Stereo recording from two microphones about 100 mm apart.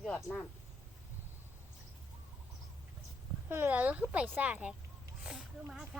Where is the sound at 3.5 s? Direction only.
20° right (ahead or behind).